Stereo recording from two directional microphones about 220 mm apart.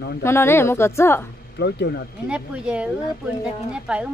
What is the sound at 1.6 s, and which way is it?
Speech, 50° left (ahead or behind).